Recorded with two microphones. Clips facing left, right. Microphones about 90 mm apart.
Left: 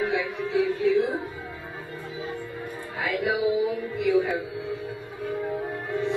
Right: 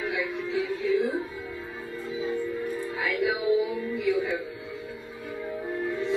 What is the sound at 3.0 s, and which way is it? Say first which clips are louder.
Music: left 3 dB; 20° left (ahead or behind).